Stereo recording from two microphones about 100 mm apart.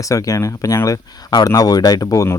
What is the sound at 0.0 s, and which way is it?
Speech, 35° left (ahead or behind).